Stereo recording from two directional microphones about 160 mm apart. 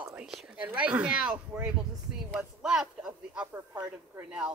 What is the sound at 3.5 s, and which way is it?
Speech, 15° right (ahead or behind).